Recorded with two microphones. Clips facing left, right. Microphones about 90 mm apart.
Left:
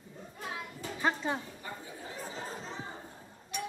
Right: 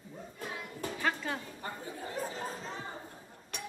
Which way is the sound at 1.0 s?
20° left (ahead or behind).